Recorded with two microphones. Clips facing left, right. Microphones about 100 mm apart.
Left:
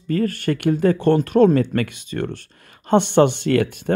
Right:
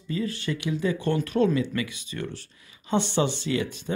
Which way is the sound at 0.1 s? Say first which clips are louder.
Left 8 dB; 55° left (ahead or behind).